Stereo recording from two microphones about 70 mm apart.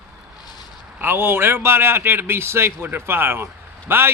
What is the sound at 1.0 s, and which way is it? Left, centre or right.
A man's voice, right.